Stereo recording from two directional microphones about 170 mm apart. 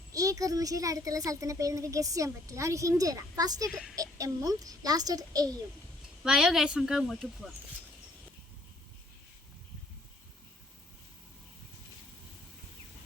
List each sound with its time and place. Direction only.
0.1 s speech: 20° right (ahead or behind)
3.7 s speech: 5° right (ahead or behind)
3.9 s speech: 20° right (ahead or behind)
6.2 s speech: centre (ahead or behind)